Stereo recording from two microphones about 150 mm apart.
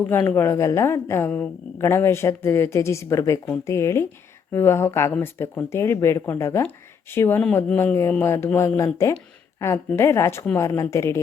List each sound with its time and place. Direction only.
0.1 s a woman's voice: 15° left (ahead or behind)